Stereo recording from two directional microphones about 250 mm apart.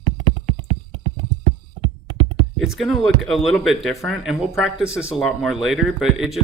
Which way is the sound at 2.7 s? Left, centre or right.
Centre.